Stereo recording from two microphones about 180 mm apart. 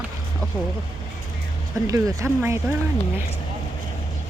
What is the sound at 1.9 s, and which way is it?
Speech, 20° right (ahead or behind).